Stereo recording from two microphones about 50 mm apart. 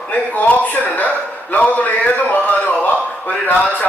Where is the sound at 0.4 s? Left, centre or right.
Left.